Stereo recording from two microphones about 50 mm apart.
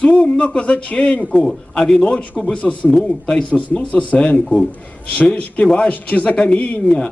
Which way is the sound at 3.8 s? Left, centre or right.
Left.